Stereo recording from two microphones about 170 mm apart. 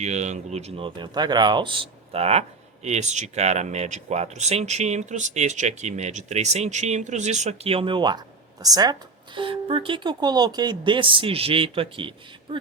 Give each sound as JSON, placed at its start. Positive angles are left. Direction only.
{"t": 0.0, "sound": "speech", "side_deg": -40}